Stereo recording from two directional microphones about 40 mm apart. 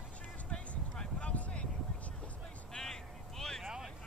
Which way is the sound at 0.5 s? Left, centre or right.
Left.